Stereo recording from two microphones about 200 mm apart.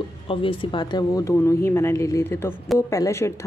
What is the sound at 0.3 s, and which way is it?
Speech, 25° left (ahead or behind).